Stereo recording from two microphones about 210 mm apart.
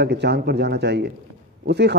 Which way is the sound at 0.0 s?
50° right (ahead or behind).